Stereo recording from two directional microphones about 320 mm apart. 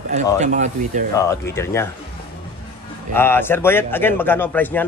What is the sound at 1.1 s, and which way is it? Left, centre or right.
Speech, centre.